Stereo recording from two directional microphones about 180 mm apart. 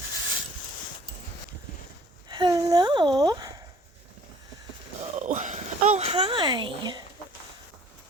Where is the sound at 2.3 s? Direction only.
25° right (ahead or behind).